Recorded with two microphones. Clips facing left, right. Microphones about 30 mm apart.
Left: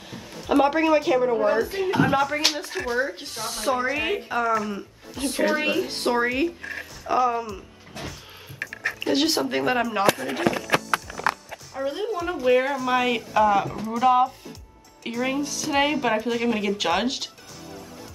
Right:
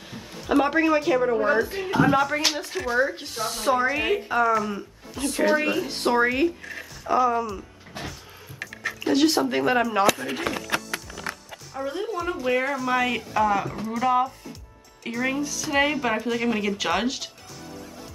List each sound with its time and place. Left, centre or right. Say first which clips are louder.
0.1 s a sound: left 1 dB; centre
0.6 s speech: left 1 dB; centre
9.0 s speech: right 3 dB; centre
10.3 s a sound: left 4 dB; left
11.8 s a woman's voice: left 2 dB; centre
12.1 s speech: left 5 dB; centre